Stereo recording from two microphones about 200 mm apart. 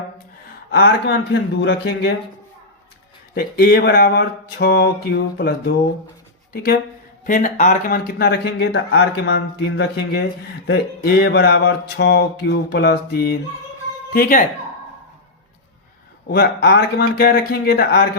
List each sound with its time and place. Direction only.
0.7 s speech: 55° left (ahead or behind)
3.3 s speech: 50° left (ahead or behind)
16.3 s speech: 50° left (ahead or behind)